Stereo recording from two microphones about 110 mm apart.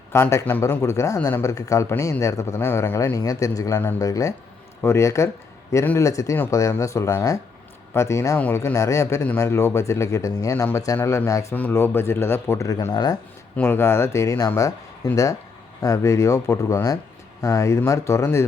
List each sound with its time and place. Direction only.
0.1 s speech: 25° left (ahead or behind)
11.5 s speech: 20° left (ahead or behind); by 13.1 s 35° left (ahead or behind)
13.6 s speech: 20° left (ahead or behind)